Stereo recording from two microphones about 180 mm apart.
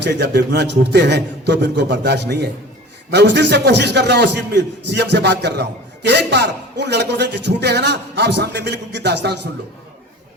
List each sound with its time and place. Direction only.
0.0 s a man's voice: 70° right (ahead or behind)